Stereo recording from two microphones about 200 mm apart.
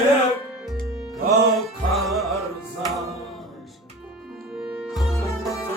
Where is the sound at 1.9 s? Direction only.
Centre (ahead or behind).